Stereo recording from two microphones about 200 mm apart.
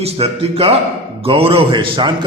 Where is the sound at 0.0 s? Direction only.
30° right (ahead or behind).